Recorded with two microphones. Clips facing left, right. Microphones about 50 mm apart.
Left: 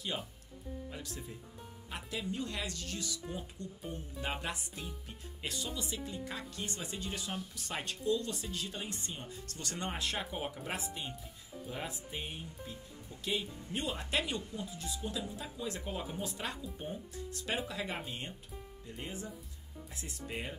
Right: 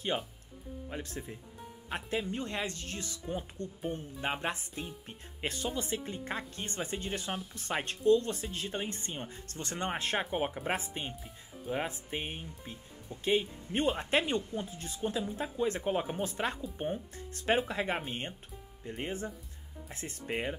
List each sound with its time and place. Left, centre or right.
0.8 s speech: right